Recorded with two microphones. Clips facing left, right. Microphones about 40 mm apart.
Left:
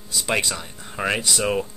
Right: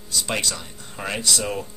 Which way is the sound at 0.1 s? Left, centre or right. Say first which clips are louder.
Left 2 dB; centre.